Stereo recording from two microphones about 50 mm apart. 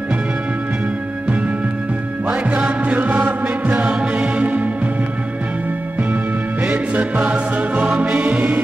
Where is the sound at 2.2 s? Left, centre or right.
Right.